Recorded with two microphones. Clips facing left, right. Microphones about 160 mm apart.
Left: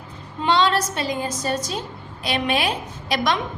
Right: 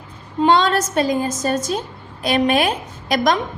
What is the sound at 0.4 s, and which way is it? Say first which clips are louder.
A woman's voice: right 4 dB; 45° right (ahead or behind).